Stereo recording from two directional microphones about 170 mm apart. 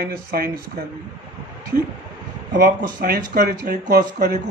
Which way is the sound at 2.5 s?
65° right (ahead or behind).